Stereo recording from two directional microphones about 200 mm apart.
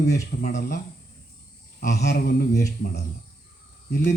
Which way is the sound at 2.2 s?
50° left (ahead or behind).